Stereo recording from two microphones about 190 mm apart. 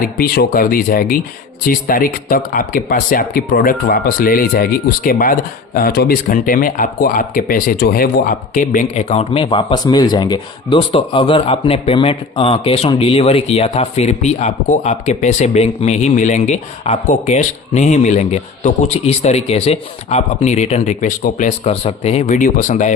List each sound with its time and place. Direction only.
0.0 s speech: 50° left (ahead or behind)